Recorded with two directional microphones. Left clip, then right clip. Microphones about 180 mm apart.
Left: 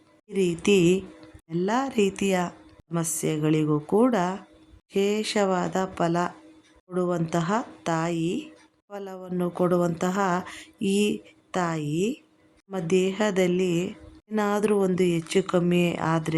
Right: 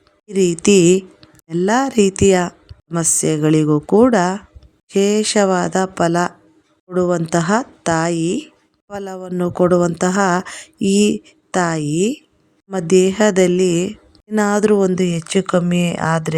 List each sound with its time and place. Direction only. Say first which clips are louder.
0.3 s speech: right 8 dB; 35° right (ahead or behind)